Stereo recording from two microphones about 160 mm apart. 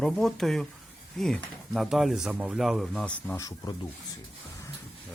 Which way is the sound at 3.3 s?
20° left (ahead or behind).